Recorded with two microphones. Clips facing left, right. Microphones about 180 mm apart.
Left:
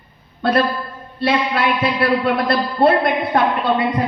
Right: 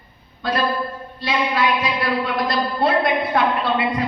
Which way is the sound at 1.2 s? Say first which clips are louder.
Left 3 dB; 60° left (ahead or behind).